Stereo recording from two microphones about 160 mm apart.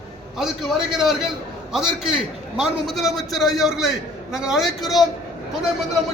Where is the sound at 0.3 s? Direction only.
Centre (ahead or behind).